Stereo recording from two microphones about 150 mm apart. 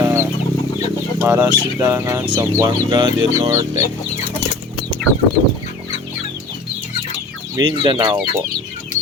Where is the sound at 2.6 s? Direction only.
25° right (ahead or behind).